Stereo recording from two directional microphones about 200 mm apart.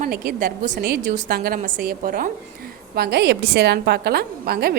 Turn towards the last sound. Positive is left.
turn(degrees=-50)  # may be behind; listen again after turning